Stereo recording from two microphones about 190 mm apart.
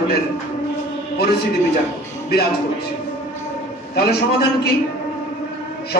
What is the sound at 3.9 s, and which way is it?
Speech, 55° left (ahead or behind).